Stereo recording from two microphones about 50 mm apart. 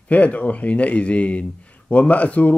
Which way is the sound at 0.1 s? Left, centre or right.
Left.